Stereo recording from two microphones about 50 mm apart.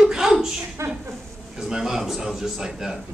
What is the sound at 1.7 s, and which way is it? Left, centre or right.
A man's voice, centre.